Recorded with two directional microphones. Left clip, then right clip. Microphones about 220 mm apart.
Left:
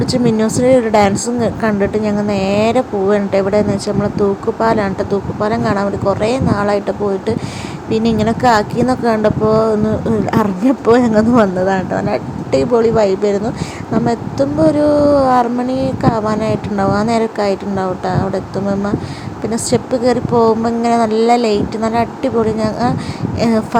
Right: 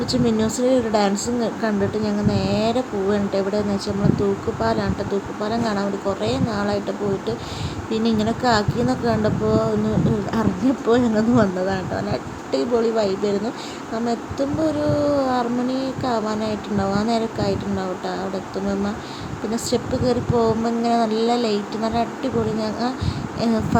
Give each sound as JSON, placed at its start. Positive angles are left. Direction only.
{"t": 0.0, "sound": "speech", "side_deg": 25}